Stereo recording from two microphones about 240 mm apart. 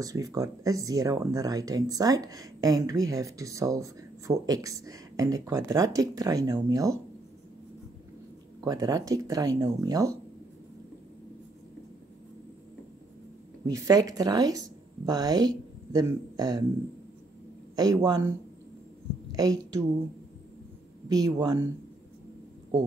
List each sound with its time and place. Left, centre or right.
0.0 s speech: centre
8.6 s speech: centre
13.7 s speech: centre
17.7 s speech: centre
19.3 s a woman's voice: centre
21.1 s speech: centre